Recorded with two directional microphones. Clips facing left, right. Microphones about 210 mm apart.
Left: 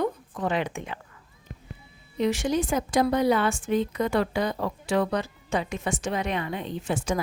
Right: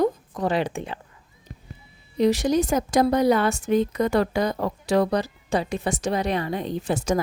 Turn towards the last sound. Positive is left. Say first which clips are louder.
# right 4 dB
turn(degrees=-40)  # may be behind; listen again after turning